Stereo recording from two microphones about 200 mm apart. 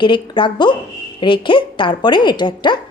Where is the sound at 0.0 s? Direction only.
25° left (ahead or behind).